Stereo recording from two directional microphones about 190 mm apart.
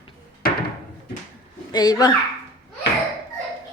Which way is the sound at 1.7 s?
20° left (ahead or behind).